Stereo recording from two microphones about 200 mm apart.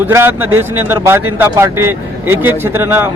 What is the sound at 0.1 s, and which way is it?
Speech, 10° right (ahead or behind).